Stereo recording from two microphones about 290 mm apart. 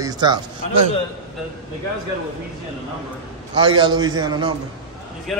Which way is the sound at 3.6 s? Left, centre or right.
Centre.